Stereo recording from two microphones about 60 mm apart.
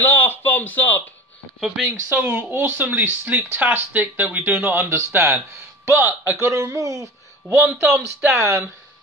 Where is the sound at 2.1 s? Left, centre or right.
Right.